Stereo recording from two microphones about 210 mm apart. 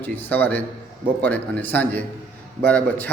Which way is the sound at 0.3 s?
10° left (ahead or behind).